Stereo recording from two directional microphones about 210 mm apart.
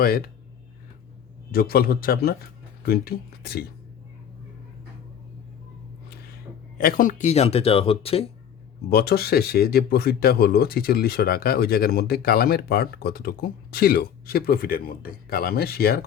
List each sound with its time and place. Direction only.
0.0 s speech: 45° left (ahead or behind)
1.5 s speech: 45° left (ahead or behind)
6.7 s speech: 45° left (ahead or behind); by 8.3 s 25° left (ahead or behind)
8.9 s speech: 50° left (ahead or behind)